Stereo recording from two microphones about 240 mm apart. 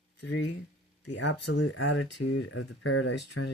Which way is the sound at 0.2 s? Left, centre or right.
Left.